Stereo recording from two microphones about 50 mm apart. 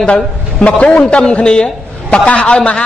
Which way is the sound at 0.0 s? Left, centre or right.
Left.